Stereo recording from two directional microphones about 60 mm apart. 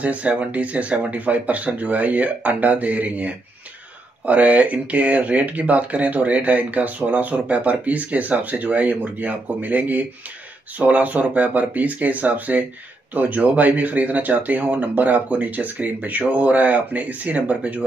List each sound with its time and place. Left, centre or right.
0.0 s speech: right